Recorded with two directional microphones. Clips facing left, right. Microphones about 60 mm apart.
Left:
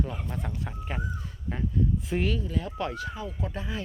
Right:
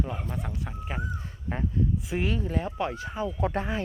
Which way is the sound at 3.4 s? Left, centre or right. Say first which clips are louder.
Right 7 dB; right.